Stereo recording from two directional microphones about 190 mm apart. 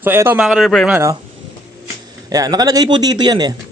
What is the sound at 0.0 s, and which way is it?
Speech, 10° right (ahead or behind).